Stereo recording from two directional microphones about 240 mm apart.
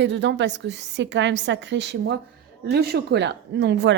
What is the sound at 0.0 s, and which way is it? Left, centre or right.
A woman's voice, right.